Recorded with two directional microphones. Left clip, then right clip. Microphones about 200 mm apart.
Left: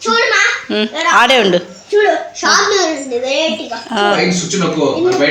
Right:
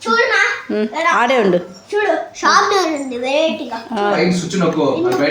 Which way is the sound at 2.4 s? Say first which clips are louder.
Right 1 dB; 15° right (ahead or behind).